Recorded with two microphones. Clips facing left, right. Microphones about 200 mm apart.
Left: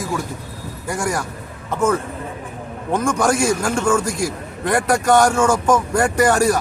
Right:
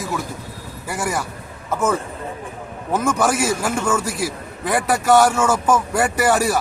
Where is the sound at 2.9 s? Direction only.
5° right (ahead or behind).